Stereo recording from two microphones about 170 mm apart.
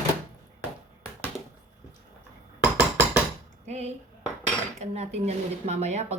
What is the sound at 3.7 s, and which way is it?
Speech, 40° right (ahead or behind).